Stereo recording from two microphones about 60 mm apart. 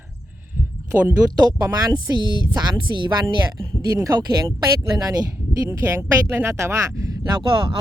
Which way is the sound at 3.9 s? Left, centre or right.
Right.